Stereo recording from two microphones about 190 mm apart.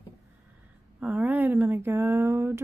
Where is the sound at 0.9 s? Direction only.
10° right (ahead or behind).